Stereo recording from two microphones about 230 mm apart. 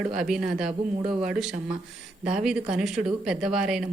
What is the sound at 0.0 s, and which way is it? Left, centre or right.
Speech, centre.